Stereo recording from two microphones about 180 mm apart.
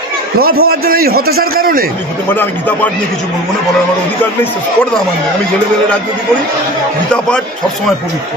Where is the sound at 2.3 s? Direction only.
10° left (ahead or behind).